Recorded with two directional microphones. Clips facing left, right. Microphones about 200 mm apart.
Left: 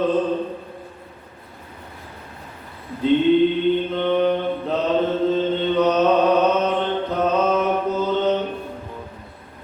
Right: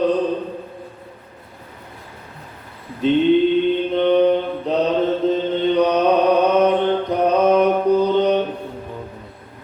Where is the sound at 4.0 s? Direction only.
20° right (ahead or behind).